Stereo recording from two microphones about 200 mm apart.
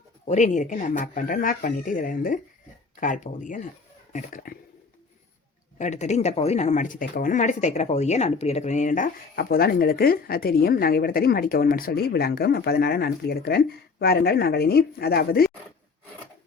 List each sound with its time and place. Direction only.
0.3 s speech: 35° left (ahead or behind)
5.8 s speech: 35° left (ahead or behind)